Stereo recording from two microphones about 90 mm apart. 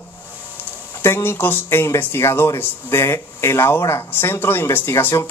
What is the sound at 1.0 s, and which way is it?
Speech, 25° left (ahead or behind).